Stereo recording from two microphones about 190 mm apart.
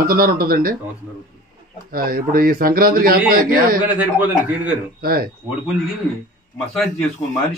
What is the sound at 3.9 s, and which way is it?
Speech, 5° right (ahead or behind).